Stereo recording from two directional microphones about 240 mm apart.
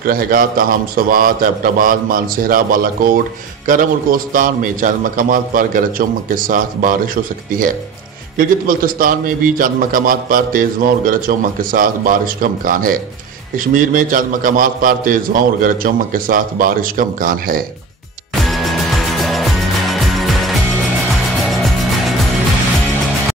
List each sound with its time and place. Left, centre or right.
0.0 s a man's voice: right
8.4 s a man's voice: right
18.4 s music: centre